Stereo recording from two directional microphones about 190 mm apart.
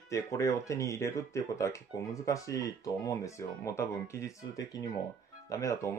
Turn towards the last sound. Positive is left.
turn(degrees=15)  # may be behind; listen again after turning